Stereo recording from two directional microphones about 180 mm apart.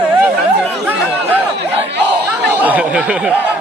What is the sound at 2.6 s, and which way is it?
Speech, 10° right (ahead or behind).